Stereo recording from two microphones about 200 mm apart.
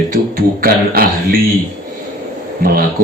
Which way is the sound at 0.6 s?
45° right (ahead or behind).